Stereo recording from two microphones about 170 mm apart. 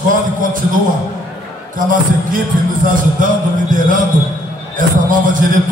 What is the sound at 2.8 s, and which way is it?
A man's voice, 50° right (ahead or behind).